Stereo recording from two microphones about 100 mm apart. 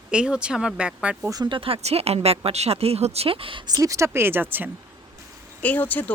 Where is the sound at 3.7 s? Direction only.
30° right (ahead or behind).